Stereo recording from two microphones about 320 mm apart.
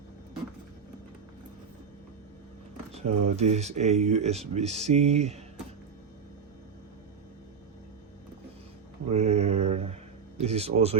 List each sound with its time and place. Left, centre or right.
2.9 s speech: right
9.0 s mantra: centre
10.4 s speech: centre